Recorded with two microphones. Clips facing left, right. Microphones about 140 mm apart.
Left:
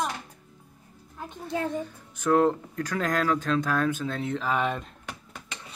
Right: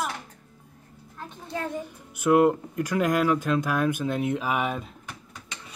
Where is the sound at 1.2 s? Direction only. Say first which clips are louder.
Left 3 dB; 20° left (ahead or behind).